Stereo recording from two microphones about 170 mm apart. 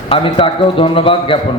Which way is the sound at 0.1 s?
30° left (ahead or behind).